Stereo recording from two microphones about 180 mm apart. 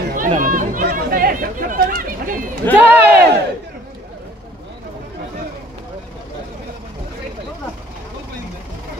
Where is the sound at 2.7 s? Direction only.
10° left (ahead or behind).